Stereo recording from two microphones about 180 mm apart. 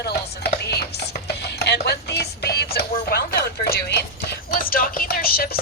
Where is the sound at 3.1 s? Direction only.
60° left (ahead or behind).